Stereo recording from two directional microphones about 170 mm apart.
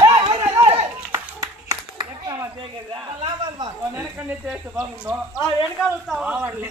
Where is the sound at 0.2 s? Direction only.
20° right (ahead or behind).